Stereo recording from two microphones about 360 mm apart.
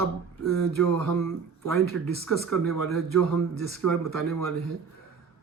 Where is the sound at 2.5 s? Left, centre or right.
Right.